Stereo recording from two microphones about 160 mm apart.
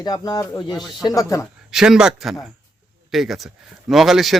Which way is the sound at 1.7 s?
5° right (ahead or behind).